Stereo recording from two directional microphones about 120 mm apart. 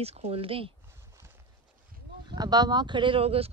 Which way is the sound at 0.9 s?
25° right (ahead or behind).